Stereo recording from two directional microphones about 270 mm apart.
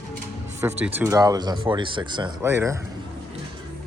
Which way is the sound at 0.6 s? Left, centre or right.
Centre.